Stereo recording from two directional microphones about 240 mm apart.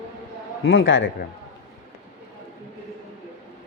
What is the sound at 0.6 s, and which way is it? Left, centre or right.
Speech, left.